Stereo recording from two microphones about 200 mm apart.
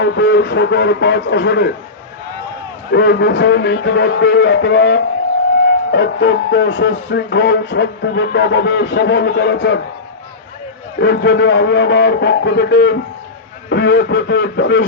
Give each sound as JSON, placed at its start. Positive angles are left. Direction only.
{"t": 0.0, "sound": "speech", "side_deg": 65}
{"t": 2.9, "sound": "speech", "side_deg": 55}
{"t": 11.0, "sound": "speech", "side_deg": 60}